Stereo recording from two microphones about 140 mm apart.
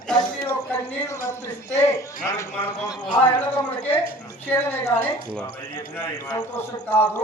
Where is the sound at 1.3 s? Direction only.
20° left (ahead or behind).